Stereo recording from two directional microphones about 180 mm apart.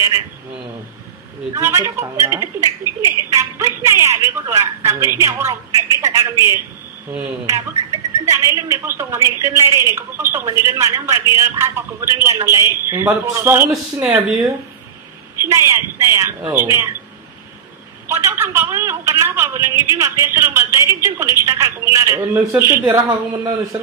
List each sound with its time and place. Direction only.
1.5 s a woman's voice: 15° right (ahead or behind)
8.5 s a woman's voice: 15° right (ahead or behind)
18.0 s a woman's voice: 15° right (ahead or behind)